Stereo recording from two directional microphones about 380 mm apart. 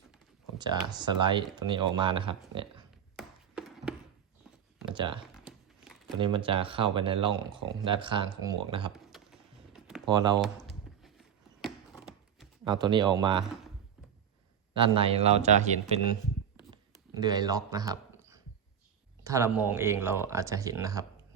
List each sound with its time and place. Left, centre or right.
0.6 s speech: centre
3.2 s a sound: centre
4.9 s speech: centre
5.3 s crumpling: centre
6.1 s speech: centre
8.9 s typing: centre
10.1 s speech: centre
11.0 s a sound: centre
12.6 s speech: centre
14.8 s speech: centre
17.2 s speech: centre